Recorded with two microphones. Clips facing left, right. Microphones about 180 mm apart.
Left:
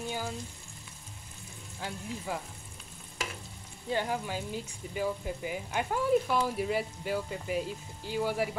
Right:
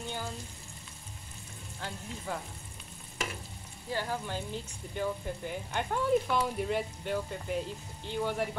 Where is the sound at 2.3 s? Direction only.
10° left (ahead or behind).